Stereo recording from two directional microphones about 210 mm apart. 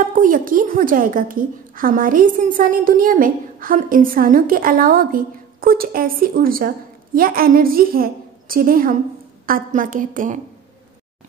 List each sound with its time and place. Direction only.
0.0 s a woman's voice: 40° right (ahead or behind)